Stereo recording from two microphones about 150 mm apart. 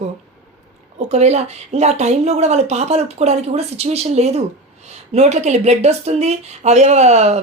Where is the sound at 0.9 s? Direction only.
50° right (ahead or behind).